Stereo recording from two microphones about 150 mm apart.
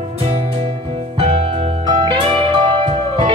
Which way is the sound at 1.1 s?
40° right (ahead or behind).